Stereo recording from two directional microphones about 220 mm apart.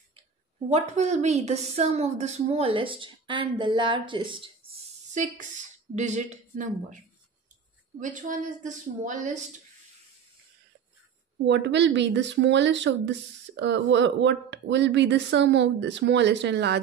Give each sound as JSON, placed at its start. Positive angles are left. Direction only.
{"t": 0.7, "sound": "a woman's voice", "side_deg": -30}
{"t": 4.6, "sound": "speech", "side_deg": -35}
{"t": 8.0, "sound": "speech", "side_deg": -35}
{"t": 11.4, "sound": "speech", "side_deg": -55}